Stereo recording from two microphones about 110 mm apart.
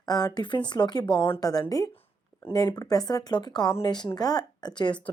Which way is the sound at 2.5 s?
30° left (ahead or behind).